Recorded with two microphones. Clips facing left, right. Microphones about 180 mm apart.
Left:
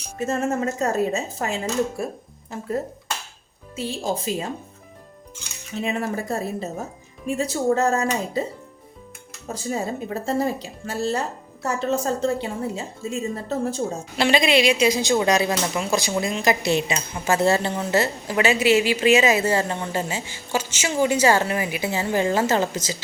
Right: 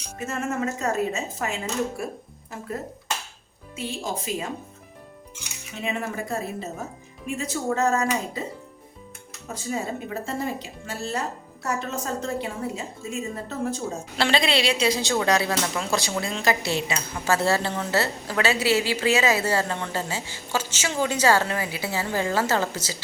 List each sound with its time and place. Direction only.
0.2 s a woman's voice: 35° left (ahead or behind)
3.8 s a woman's voice: 35° left (ahead or behind)
5.7 s a woman's voice: 35° left (ahead or behind)
9.5 s a woman's voice: 35° left (ahead or behind)
14.2 s a woman's voice: 15° left (ahead or behind)